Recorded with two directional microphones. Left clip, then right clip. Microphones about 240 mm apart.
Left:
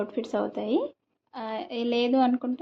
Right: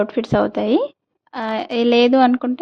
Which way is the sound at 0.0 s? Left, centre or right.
Right.